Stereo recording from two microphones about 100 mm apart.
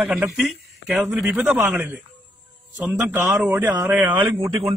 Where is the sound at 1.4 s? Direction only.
15° right (ahead or behind).